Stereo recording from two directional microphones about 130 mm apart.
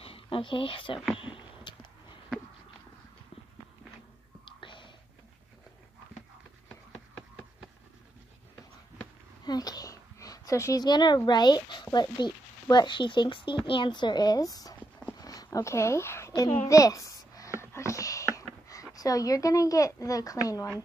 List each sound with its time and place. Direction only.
0.0 s speech: 45° left (ahead or behind)
1.1 s a sound: 40° left (ahead or behind)
4.5 s whispering: 40° left (ahead or behind)
9.4 s a child's voice: 30° left (ahead or behind)
15.1 s a sound: 30° left (ahead or behind)
18.9 s speech: 25° left (ahead or behind)